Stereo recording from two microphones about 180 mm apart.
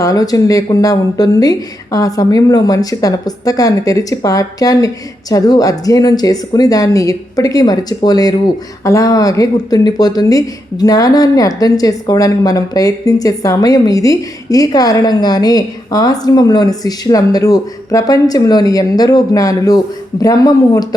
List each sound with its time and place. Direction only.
0.0 s speech: 20° left (ahead or behind)